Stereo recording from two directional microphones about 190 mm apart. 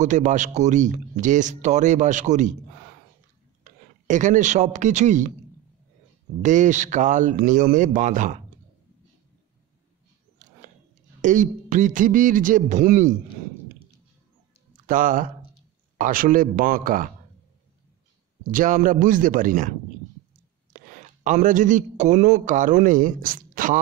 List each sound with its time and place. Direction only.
0.0 s speech: 40° right (ahead or behind)
3.6 s speech: 40° right (ahead or behind)
6.4 s speech: 40° right (ahead or behind)
11.1 s a man's voice: 40° right (ahead or behind)
14.9 s a man's voice: 45° right (ahead or behind)
18.5 s a man's voice: 45° right (ahead or behind)
20.7 s a man's voice: 45° right (ahead or behind)